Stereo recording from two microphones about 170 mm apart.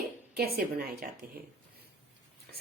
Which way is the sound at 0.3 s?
65° right (ahead or behind).